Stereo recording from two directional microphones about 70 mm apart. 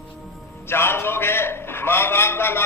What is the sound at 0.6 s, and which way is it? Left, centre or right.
A man's voice, left.